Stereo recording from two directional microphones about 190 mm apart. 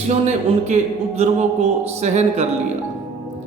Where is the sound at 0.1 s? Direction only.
35° right (ahead or behind).